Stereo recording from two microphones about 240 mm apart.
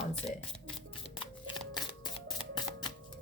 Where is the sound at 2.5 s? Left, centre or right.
Centre.